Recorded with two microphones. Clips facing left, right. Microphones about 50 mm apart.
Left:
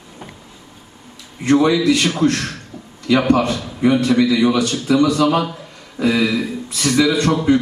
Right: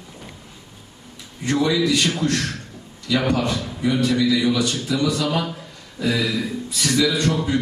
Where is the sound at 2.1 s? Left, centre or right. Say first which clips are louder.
Left 5 dB; left.